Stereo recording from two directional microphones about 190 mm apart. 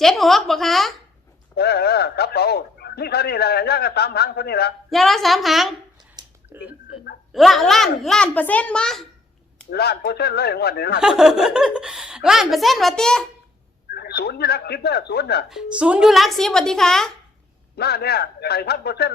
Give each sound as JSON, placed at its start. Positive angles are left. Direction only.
{"t": 0.0, "sound": "a woman's voice", "side_deg": 0}
{"t": 1.5, "sound": "a man's voice", "side_deg": 55}
{"t": 4.9, "sound": "a woman's voice", "side_deg": 0}
{"t": 6.2, "sound": "a sound", "side_deg": -20}
{"t": 6.5, "sound": "a woman's voice", "side_deg": -10}
{"t": 9.6, "sound": "a man's voice", "side_deg": 55}
{"t": 11.0, "sound": "a woman's voice", "side_deg": -5}
{"t": 13.9, "sound": "a man's voice", "side_deg": 55}
{"t": 15.4, "sound": "a woman's voice", "side_deg": -5}
{"t": 17.7, "sound": "a man's voice", "side_deg": 55}